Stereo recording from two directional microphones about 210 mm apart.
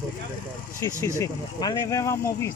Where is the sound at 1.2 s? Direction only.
20° left (ahead or behind).